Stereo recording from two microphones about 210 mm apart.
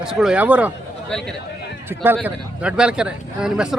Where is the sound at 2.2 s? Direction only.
5° right (ahead or behind).